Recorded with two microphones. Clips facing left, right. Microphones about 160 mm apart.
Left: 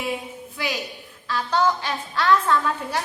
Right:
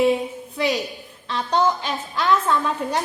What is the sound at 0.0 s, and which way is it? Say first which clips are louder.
A woman's voice: right 10 dB; 25° right (ahead or behind).